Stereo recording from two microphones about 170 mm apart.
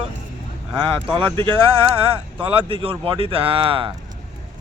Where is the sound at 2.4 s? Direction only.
30° right (ahead or behind).